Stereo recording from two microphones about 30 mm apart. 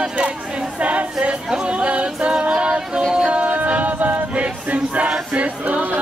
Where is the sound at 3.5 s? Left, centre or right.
Right.